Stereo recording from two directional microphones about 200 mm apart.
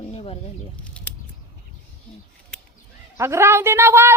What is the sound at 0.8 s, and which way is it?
Speech, 5° left (ahead or behind).